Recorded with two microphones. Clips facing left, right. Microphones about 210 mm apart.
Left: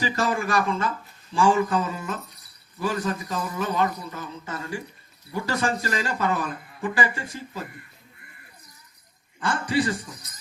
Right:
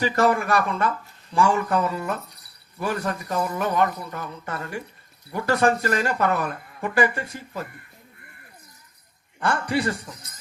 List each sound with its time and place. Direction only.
0.0 s speech: 55° right (ahead or behind)
9.4 s speech: 55° right (ahead or behind)